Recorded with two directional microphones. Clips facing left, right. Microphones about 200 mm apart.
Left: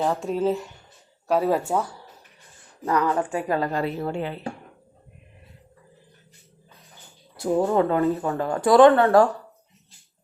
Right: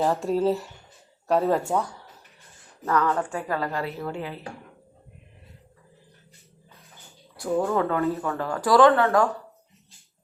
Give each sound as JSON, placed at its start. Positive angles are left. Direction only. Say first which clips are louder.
{"t": 0.0, "sound": "a woman's voice", "louder": "right 1 dB", "side_deg": 0}
{"t": 7.3, "sound": "speech", "louder": "left 3 dB", "side_deg": 25}